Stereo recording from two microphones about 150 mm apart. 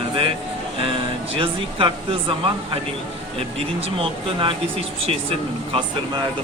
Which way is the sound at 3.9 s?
35° right (ahead or behind).